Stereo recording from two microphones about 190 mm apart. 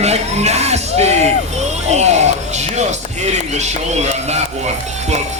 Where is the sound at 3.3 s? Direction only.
35° right (ahead or behind).